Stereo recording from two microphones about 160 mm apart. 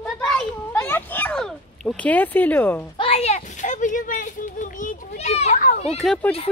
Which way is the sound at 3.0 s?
40° left (ahead or behind).